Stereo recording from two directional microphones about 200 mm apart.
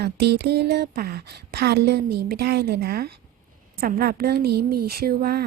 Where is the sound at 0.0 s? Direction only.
55° right (ahead or behind).